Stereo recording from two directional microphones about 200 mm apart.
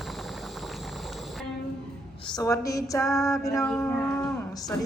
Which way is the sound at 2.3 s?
20° left (ahead or behind).